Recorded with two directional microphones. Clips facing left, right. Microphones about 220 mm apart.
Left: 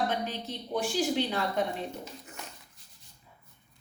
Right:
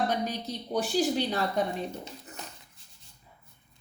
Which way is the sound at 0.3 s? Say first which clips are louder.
Right 2 dB; 40° right (ahead or behind).